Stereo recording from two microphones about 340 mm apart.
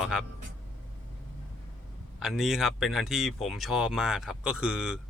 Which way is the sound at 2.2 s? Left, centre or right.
Centre.